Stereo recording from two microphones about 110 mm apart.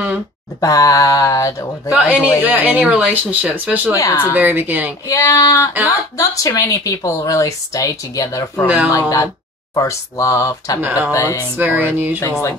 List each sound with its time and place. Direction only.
0.6 s a sound: 30° left (ahead or behind)
1.9 s speech: 10° right (ahead or behind)
5.0 s a sound: 30° left (ahead or behind)
5.9 s speech: 30° left (ahead or behind)
8.6 s speech: 10° right (ahead or behind)
9.8 s speech: 30° left (ahead or behind)
10.8 s speech: 15° right (ahead or behind)
11.1 s speech: 30° left (ahead or behind)
11.5 s speech: 15° right (ahead or behind)
12.2 s speech: 25° left (ahead or behind)